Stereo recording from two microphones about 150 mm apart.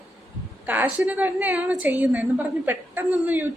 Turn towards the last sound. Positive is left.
turn(degrees=-10)  # may be behind; listen again after turning